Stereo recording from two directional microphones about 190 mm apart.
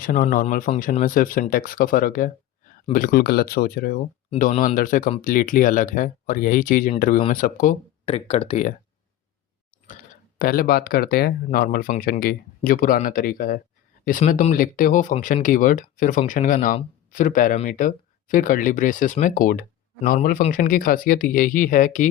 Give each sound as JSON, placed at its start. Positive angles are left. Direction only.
{"t": 0.0, "sound": "speech", "side_deg": 50}
{"t": 8.0, "sound": "speech", "side_deg": 30}
{"t": 9.9, "sound": "speech", "side_deg": 45}